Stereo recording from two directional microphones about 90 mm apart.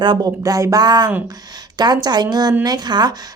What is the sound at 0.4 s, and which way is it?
Speech, 40° right (ahead or behind).